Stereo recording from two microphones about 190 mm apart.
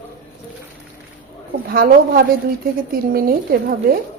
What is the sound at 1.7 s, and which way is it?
A woman's voice, 50° right (ahead or behind).